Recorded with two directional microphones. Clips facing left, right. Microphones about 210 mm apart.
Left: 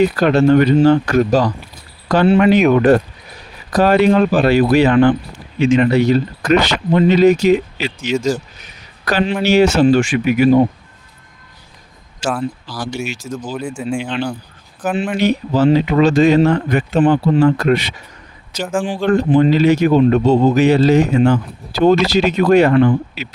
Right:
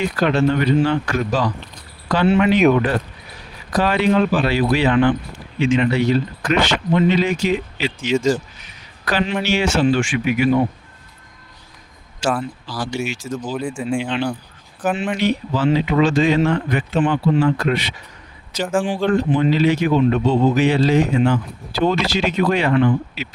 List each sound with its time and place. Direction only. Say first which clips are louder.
0.0 s speech: left 5 dB; 40° left (ahead or behind)
12.2 s speech: left 1 dB; centre (ahead or behind)
13.1 s speech: left 1 dB; 40° left (ahead or behind)
13.3 s speech: even; centre (ahead or behind)
15.2 s speech: left 7 dB; 40° left (ahead or behind)
18.6 s speech: even; 5° left (ahead or behind)
19.0 s speech: left 7 dB; 45° left (ahead or behind)